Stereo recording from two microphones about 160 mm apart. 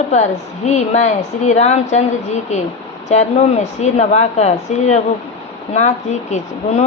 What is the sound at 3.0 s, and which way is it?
Speech, 45° left (ahead or behind).